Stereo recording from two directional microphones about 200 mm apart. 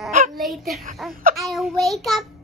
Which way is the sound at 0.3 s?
Centre (ahead or behind).